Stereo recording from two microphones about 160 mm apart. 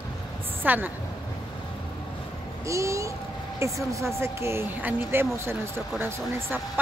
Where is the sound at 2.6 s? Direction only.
20° right (ahead or behind).